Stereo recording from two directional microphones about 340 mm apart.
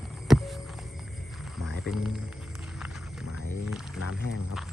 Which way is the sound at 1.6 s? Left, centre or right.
Centre.